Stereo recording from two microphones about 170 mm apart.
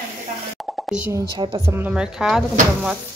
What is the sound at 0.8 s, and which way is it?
Plop, 5° right (ahead or behind).